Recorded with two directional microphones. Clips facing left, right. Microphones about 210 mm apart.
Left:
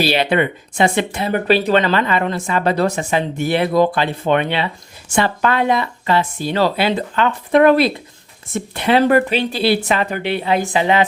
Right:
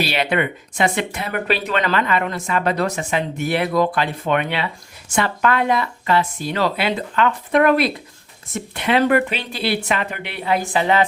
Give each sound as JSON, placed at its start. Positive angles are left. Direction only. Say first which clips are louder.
{"t": 0.0, "sound": "speech", "louder": "left 4 dB", "side_deg": 30}